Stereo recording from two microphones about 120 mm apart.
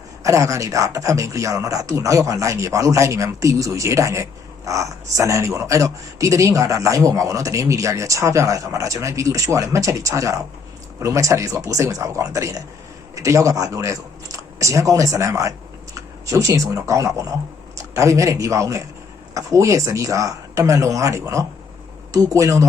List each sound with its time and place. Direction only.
0.2 s a man's voice: 25° right (ahead or behind)